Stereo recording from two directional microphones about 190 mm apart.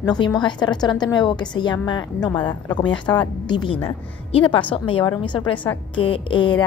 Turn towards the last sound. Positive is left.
turn(degrees=25)  # may be behind; listen again after turning